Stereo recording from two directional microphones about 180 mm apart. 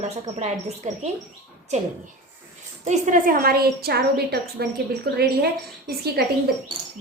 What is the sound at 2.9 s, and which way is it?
A woman's voice, 45° right (ahead or behind).